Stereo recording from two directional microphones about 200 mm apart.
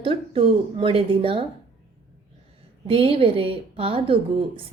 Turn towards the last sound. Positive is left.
turn(degrees=-25)  # may be behind; listen again after turning